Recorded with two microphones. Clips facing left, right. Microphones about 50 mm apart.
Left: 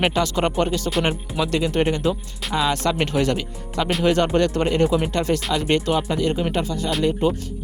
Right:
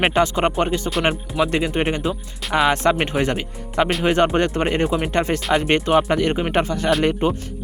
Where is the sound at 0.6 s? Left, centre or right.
Right.